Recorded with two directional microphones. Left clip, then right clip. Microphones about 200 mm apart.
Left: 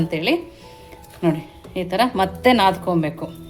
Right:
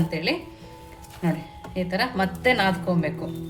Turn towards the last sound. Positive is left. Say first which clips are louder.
# left 6 dB
turn(degrees=40)  # may be behind; listen again after turning